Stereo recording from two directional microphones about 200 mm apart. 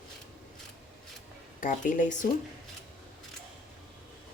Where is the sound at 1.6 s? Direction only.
40° left (ahead or behind).